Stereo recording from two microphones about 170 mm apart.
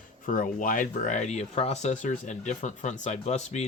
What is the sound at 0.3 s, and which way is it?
Speech, 50° left (ahead or behind).